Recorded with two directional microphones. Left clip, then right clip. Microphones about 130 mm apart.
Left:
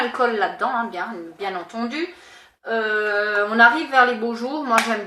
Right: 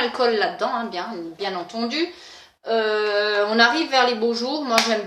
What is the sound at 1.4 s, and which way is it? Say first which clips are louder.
Speech: even; 25° right (ahead or behind).